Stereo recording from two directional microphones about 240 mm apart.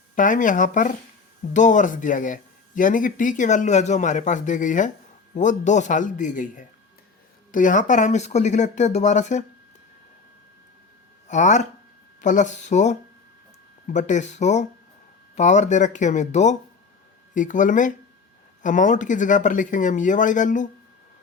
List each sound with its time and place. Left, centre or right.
0.2 s speech: left
11.3 s speech: left